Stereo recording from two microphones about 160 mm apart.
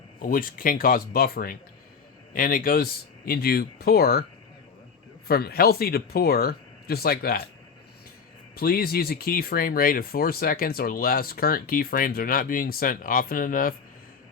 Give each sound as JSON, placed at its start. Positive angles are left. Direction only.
{"t": 0.2, "sound": "speech", "side_deg": 60}
{"t": 5.3, "sound": "speech", "side_deg": 75}
{"t": 8.5, "sound": "speech", "side_deg": 70}